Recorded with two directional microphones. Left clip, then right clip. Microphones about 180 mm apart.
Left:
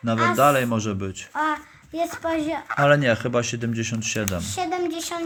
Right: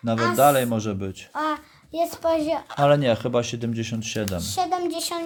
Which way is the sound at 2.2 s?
25° right (ahead or behind).